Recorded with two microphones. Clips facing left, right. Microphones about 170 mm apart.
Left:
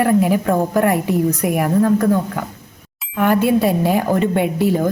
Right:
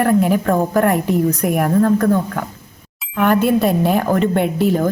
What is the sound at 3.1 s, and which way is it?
Speech, 50° right (ahead or behind).